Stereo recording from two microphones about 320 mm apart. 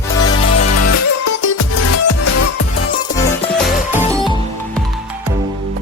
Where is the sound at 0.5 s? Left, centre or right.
Left.